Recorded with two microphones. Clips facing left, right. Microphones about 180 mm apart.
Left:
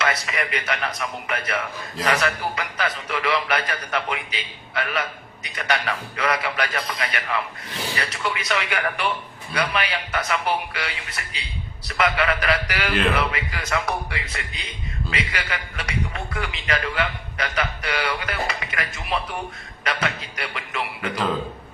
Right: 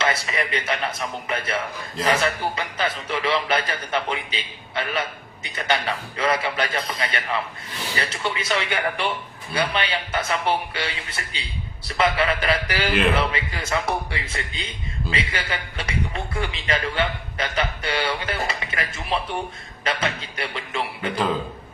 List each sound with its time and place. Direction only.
0.0 s speech: 25° right (ahead or behind)